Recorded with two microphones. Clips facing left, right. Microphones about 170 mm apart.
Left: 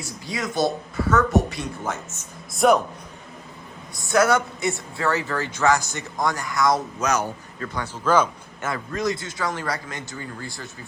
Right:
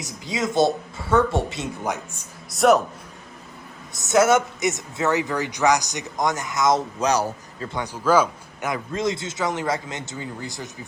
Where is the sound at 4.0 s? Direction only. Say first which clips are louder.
Right 2 dB; 20° right (ahead or behind).